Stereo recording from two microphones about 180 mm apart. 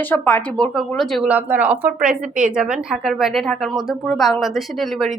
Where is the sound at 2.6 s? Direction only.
5° right (ahead or behind).